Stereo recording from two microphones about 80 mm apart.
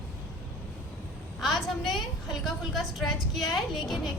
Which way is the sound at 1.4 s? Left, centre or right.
Centre.